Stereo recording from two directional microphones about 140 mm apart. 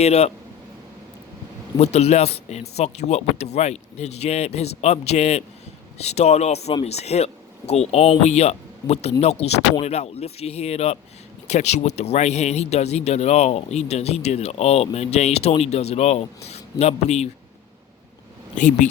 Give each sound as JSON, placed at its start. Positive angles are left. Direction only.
{"t": 0.0, "sound": "speech", "side_deg": 50}
{"t": 1.8, "sound": "speech", "side_deg": 50}
{"t": 18.5, "sound": "speech", "side_deg": 60}